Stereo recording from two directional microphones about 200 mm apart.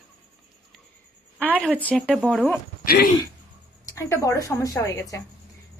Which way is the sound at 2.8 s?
50° left (ahead or behind).